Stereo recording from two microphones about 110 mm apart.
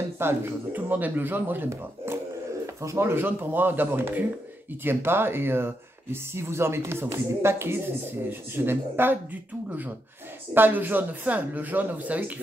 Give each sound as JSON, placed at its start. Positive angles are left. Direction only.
{"t": 0.2, "sound": "speech", "side_deg": -20}